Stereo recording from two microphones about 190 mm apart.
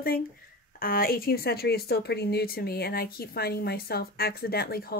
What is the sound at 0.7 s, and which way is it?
Speech, 50° left (ahead or behind).